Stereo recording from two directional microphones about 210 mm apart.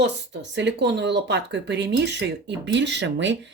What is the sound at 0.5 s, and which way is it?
Speech, 55° right (ahead or behind).